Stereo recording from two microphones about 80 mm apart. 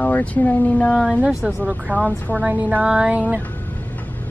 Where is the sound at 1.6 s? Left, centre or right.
Centre.